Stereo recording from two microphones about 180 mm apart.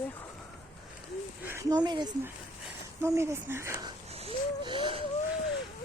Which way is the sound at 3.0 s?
15° right (ahead or behind).